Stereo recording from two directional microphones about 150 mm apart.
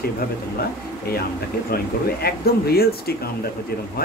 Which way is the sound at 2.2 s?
90° left.